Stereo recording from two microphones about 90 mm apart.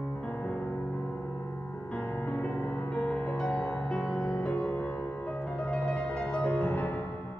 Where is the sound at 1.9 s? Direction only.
15° left (ahead or behind).